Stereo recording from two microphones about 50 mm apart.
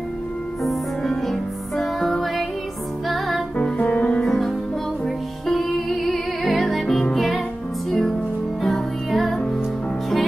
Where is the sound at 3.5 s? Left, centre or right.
Left.